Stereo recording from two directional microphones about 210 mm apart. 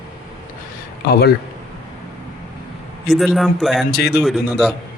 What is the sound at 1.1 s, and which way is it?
Speech, 50° left (ahead or behind).